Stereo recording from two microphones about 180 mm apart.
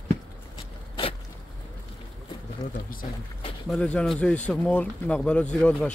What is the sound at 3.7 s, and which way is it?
Speech, 5° left (ahead or behind).